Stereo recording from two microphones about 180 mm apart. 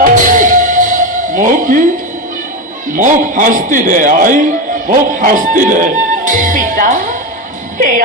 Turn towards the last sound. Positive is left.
turn(degrees=-50)  # may be behind; listen again after turning